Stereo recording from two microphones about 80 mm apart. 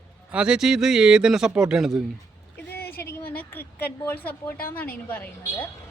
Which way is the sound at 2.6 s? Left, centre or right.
Left.